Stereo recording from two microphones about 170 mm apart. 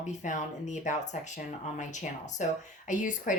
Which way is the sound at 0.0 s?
45° left (ahead or behind).